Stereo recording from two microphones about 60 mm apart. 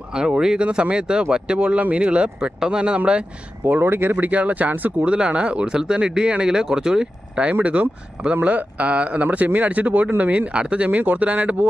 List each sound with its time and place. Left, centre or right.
0.1 s speech: centre
3.6 s speech: right